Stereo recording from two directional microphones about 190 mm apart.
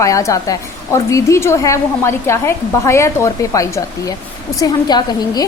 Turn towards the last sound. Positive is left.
turn(degrees=20)  # may be behind; listen again after turning